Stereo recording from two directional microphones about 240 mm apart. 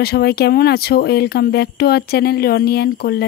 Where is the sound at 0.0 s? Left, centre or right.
Left.